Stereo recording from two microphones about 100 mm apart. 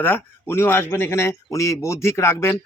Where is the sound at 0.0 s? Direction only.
25° left (ahead or behind).